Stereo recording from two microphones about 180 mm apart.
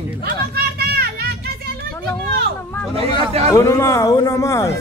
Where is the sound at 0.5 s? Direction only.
60° right (ahead or behind).